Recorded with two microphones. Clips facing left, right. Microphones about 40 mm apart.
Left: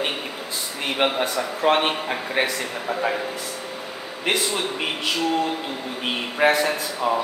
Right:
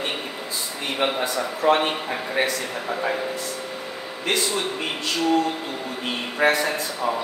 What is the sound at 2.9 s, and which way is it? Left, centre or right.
Speech, centre.